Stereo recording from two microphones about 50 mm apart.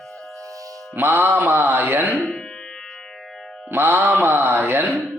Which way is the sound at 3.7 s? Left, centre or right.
Right.